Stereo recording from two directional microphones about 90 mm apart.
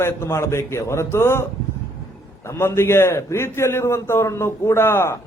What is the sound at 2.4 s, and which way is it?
A man's voice, 30° left (ahead or behind).